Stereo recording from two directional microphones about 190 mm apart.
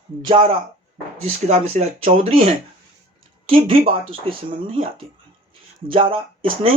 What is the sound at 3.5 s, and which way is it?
Speech, 30° right (ahead or behind).